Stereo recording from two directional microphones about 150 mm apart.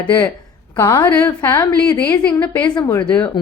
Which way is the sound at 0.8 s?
30° left (ahead or behind).